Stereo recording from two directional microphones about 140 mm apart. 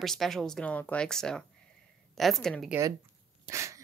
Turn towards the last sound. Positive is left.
turn(degrees=-20)  # may be behind; listen again after turning